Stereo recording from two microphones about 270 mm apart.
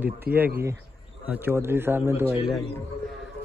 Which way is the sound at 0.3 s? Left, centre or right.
Right.